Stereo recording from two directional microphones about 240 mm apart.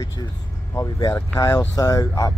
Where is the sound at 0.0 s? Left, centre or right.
Centre.